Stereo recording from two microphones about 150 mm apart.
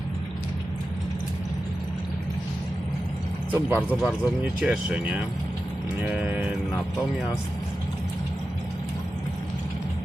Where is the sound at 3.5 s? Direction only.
15° right (ahead or behind).